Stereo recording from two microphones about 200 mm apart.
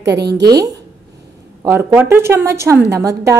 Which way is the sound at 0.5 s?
20° right (ahead or behind).